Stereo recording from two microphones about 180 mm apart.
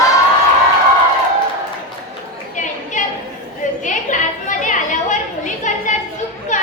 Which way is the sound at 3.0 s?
45° left (ahead or behind).